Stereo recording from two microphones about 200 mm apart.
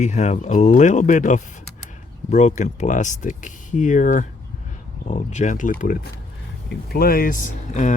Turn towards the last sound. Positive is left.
turn(degrees=40)  # may be behind; listen again after turning